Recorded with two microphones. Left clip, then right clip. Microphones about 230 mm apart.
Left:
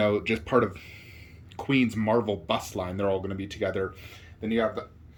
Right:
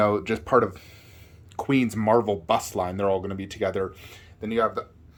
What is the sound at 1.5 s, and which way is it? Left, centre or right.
Speech, centre.